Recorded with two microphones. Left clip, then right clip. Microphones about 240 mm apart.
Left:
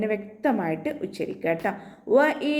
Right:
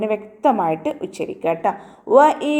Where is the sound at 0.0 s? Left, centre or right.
Right.